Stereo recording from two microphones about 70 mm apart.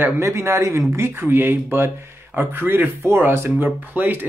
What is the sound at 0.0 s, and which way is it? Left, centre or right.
Speech, right.